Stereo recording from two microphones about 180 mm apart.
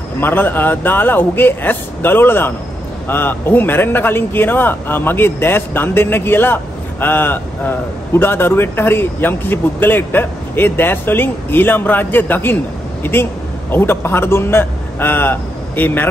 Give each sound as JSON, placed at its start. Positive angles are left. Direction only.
{"t": 0.2, "sound": "a man's voice", "side_deg": 10}